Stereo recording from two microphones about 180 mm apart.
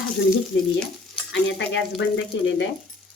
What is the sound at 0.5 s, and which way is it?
Speech, 90° left.